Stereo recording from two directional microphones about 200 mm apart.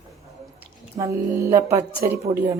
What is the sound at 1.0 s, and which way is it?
A woman's voice, 25° right (ahead or behind).